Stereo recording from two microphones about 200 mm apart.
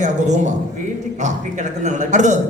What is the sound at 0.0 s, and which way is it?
A man's voice, 35° right (ahead or behind).